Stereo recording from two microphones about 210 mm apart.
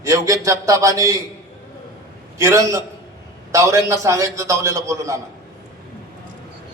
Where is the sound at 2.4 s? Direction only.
15° right (ahead or behind).